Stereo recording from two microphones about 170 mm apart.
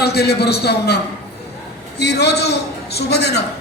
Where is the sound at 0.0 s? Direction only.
70° left (ahead or behind).